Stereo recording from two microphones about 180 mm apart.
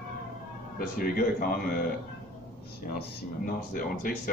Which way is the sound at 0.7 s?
55° left (ahead or behind).